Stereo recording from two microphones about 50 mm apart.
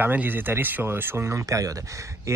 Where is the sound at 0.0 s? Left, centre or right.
Right.